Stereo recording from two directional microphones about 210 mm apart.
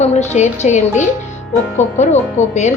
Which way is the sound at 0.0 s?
30° left (ahead or behind).